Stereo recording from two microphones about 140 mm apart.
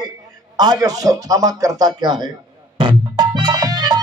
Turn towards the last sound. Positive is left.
turn(degrees=-30)  # may be behind; listen again after turning